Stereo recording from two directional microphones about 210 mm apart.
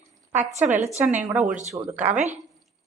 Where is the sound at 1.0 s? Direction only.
10° right (ahead or behind).